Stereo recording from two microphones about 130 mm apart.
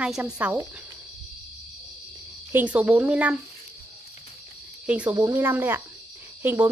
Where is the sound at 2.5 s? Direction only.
10° right (ahead or behind).